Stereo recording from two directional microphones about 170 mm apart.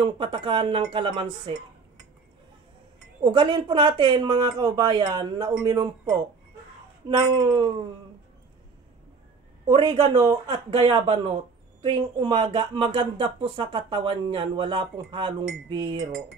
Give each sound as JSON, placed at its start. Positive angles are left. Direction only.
{"t": 0.0, "sound": "speech", "side_deg": -30}
{"t": 3.3, "sound": "speech", "side_deg": -30}
{"t": 7.1, "sound": "speech", "side_deg": -25}
{"t": 9.7, "sound": "speech", "side_deg": -25}